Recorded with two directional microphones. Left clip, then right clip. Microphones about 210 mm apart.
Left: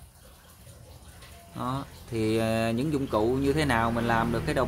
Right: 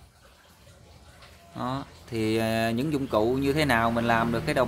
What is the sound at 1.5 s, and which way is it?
Speech, 20° right (ahead or behind).